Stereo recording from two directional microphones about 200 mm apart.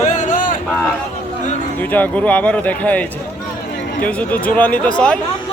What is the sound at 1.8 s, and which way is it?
Speech, 10° left (ahead or behind).